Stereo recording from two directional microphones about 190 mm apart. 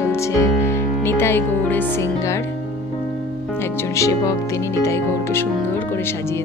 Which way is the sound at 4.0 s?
15° left (ahead or behind).